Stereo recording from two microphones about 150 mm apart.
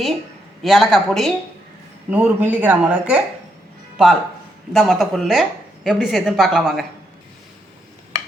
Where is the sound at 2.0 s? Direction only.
10° right (ahead or behind).